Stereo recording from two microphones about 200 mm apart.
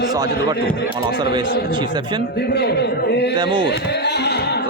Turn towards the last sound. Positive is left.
turn(degrees=55)  # may be behind; listen again after turning